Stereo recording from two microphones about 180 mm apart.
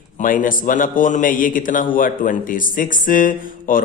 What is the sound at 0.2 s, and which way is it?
A man's voice, 50° left (ahead or behind).